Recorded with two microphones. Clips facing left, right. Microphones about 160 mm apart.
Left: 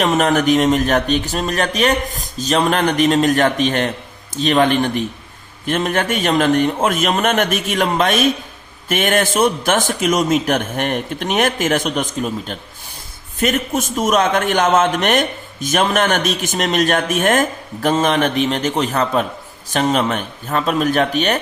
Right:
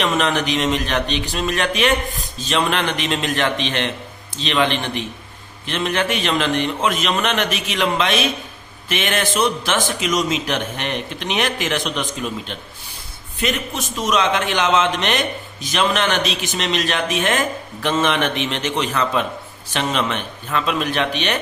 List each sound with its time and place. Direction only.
0.0 s a man's voice: 40° left (ahead or behind)